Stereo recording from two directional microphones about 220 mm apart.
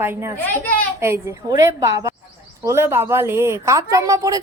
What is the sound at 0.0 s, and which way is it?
A woman's voice, 10° right (ahead or behind).